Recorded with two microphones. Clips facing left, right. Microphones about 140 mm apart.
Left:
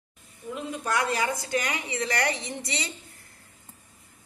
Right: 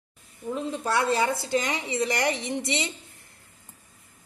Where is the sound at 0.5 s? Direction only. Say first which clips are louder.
Right 2 dB; 30° right (ahead or behind).